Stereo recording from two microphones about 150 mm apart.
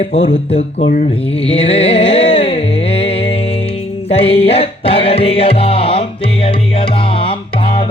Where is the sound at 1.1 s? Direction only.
40° left (ahead or behind).